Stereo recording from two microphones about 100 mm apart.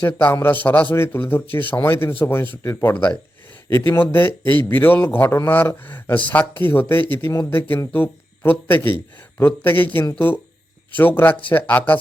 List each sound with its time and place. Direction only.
0.1 s speech: 15° left (ahead or behind)